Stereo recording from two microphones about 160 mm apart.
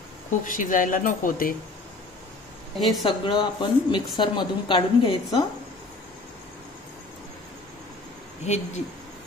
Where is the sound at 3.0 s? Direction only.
30° left (ahead or behind).